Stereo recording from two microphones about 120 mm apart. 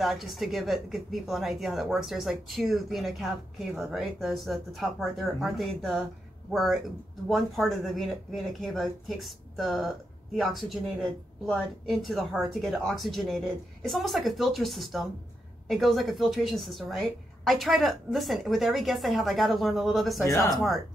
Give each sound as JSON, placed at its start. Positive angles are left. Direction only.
{"t": 0.0, "sound": "speech", "side_deg": 0}
{"t": 20.2, "sound": "speech", "side_deg": 30}
{"t": 20.5, "sound": "speech", "side_deg": 0}